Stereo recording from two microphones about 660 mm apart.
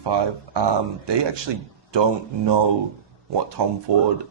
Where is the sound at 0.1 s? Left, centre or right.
Right.